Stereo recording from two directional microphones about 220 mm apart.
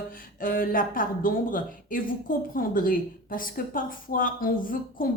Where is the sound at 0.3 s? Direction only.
40° left (ahead or behind).